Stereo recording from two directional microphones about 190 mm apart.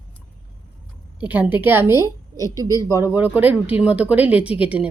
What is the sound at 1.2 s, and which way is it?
A woman's voice, 10° right (ahead or behind).